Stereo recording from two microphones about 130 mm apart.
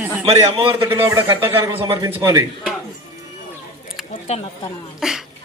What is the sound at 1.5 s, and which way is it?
Speech, 45° right (ahead or behind).